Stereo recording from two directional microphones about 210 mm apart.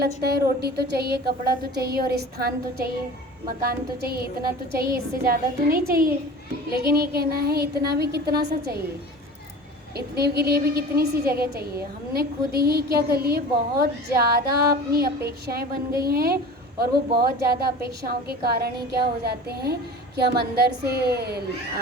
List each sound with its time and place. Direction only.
0.2 s a woman's voice: 50° right (ahead or behind)
10.2 s a woman's voice: 50° right (ahead or behind)